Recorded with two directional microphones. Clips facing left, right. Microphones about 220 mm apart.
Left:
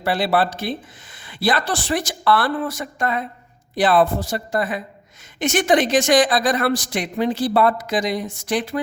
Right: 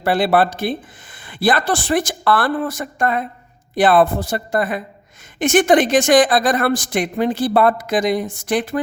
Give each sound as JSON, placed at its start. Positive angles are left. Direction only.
{"t": 0.0, "sound": "a woman's voice", "side_deg": -55}